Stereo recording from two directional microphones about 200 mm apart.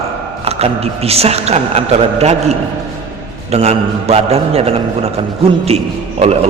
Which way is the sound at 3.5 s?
30° right (ahead or behind).